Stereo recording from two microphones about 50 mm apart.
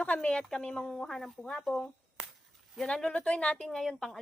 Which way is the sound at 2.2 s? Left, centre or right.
Centre.